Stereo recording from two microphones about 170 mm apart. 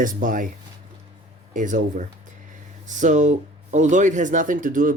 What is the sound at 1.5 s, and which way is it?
Speech, 50° right (ahead or behind).